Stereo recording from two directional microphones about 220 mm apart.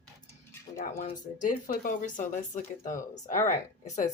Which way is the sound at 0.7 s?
30° left (ahead or behind).